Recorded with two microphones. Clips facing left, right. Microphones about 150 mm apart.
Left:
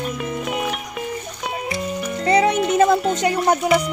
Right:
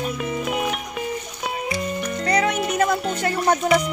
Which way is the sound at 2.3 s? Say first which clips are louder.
Left 5 dB; 25° left (ahead or behind).